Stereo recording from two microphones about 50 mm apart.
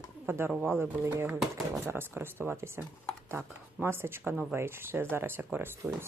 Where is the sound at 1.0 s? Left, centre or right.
Right.